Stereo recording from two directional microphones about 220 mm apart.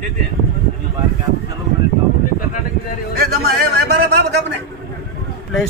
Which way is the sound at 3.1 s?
45° right (ahead or behind).